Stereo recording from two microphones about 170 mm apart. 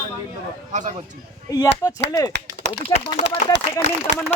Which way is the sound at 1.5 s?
20° left (ahead or behind).